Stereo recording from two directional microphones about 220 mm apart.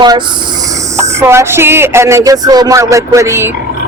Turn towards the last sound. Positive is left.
turn(degrees=-10)  # may be behind; listen again after turning